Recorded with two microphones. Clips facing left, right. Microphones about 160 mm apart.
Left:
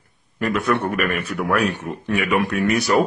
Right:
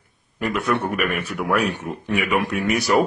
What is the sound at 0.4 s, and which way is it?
A man's voice, 10° right (ahead or behind).